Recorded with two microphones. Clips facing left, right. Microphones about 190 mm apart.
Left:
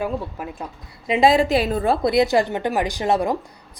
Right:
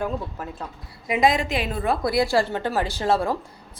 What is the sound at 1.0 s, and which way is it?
A woman's voice, 25° left (ahead or behind).